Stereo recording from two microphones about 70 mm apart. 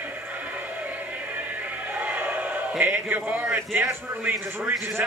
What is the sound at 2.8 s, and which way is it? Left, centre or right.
A man's voice, right.